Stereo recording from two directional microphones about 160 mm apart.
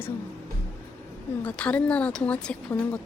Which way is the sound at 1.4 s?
10° left (ahead or behind).